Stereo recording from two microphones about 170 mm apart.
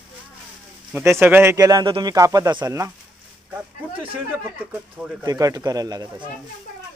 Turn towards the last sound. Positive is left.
turn(degrees=-20)  # may be behind; listen again after turning